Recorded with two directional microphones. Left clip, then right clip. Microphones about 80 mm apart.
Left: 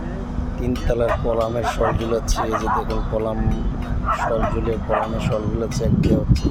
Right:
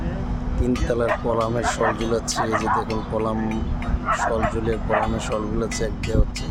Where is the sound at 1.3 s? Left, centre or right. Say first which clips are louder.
Left 1 dB; right.